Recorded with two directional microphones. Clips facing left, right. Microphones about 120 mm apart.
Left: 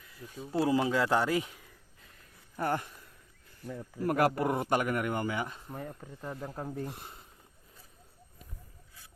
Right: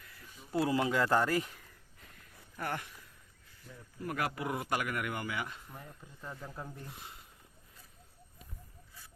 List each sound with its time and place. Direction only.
0.5 s a man's voice: 25° left (ahead or behind)
0.9 s a man's voice: 5° left (ahead or behind)
2.6 s speech: 35° left (ahead or behind)
3.7 s speech: 90° left
4.0 s speech: 50° left (ahead or behind)
4.5 s speech: 35° left (ahead or behind)
5.7 s speech: 50° left (ahead or behind)